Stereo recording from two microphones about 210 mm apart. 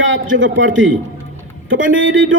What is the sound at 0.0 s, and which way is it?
A man's voice, 65° right (ahead or behind).